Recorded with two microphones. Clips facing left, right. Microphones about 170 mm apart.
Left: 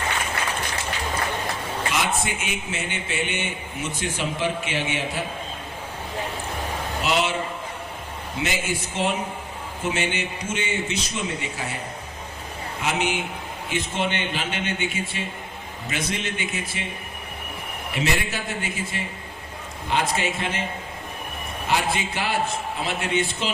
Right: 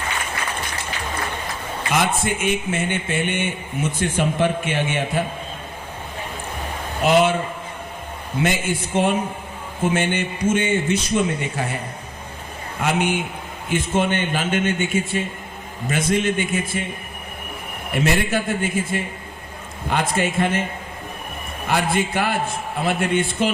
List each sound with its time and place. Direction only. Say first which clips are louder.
1.9 s a man's voice: right 6 dB; 50° right (ahead or behind)
7.0 s a man's voice: right 8 dB; 50° right (ahead or behind)
8.4 s a man's voice: right 5 dB; 55° right (ahead or behind)
12.8 s a man's voice: right 4 dB; 50° right (ahead or behind)
17.9 s a man's voice: right 6 dB; 50° right (ahead or behind)
21.7 s a man's voice: right 4 dB; 55° right (ahead or behind)